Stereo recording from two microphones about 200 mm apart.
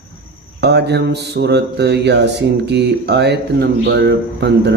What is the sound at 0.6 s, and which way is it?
Mantra, 55° right (ahead or behind).